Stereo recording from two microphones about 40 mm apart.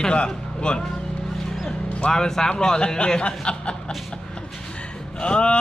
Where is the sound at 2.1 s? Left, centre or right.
Centre.